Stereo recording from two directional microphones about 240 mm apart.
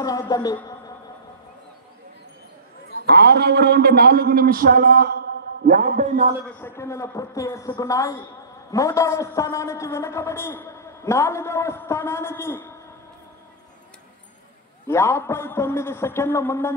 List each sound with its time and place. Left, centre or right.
0.0 s music: centre
3.1 s a man's voice: right
6.6 s a man's voice: centre
14.9 s a man's voice: centre